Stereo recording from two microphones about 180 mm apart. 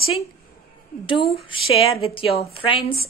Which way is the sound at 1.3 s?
30° left (ahead or behind).